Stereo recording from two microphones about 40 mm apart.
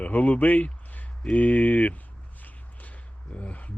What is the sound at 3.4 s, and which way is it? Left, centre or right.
Speech, left.